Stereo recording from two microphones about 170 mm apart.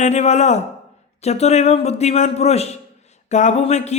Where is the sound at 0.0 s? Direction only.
40° left (ahead or behind).